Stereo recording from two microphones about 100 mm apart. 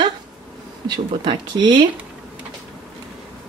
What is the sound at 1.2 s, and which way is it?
Speech, 50° right (ahead or behind).